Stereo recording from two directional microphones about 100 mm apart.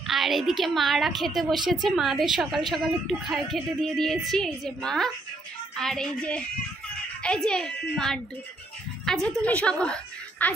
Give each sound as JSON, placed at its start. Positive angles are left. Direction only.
{"t": 0.0, "sound": "a woman's voice", "side_deg": 0}